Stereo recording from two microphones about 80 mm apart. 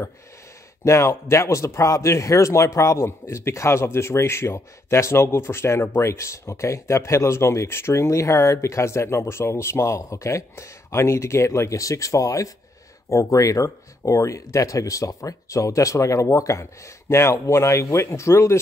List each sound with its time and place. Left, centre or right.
0.8 s speech: left